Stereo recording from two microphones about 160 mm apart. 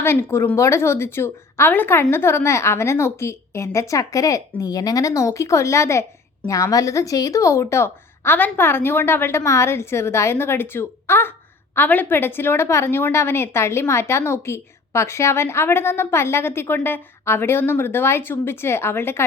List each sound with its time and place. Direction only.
0.0 s a woman's voice: 15° left (ahead or behind)